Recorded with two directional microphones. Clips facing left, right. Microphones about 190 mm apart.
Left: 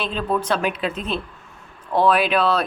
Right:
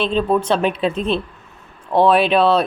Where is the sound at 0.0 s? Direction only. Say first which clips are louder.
Right 6 dB; 25° right (ahead or behind).